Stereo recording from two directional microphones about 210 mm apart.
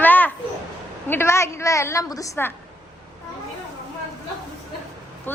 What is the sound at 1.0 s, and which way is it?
A woman's voice, 10° left (ahead or behind).